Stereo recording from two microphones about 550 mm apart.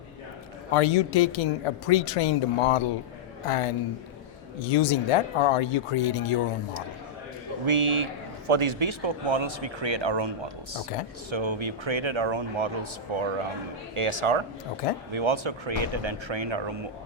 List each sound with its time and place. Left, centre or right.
0.7 s a woman's voice: left
7.6 s a man's voice: right